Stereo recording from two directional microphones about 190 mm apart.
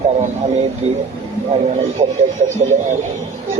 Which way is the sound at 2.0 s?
35° right (ahead or behind).